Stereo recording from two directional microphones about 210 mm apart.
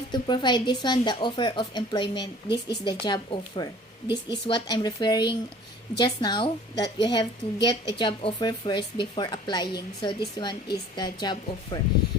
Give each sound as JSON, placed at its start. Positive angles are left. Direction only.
{"t": 0.1, "sound": "speech", "side_deg": 20}